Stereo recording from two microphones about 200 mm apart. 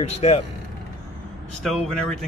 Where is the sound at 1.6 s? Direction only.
Centre (ahead or behind).